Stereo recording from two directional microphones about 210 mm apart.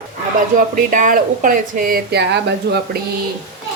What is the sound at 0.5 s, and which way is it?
A woman's voice, 40° right (ahead or behind).